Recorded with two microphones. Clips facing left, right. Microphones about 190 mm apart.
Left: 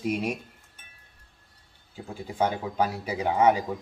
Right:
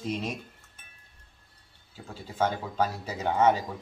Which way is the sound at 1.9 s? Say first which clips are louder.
Left 5 dB; 15° left (ahead or behind).